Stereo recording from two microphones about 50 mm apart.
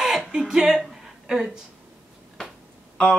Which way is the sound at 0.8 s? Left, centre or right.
Centre.